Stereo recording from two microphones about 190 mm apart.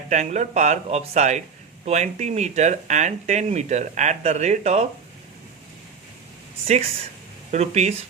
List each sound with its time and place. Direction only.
0.1 s speech: 40° right (ahead or behind)
7.5 s speech: 35° right (ahead or behind)